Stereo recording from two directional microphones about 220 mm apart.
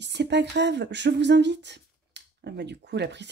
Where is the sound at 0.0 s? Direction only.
50° right (ahead or behind).